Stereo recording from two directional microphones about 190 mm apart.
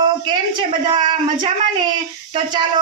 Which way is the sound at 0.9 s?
25° right (ahead or behind).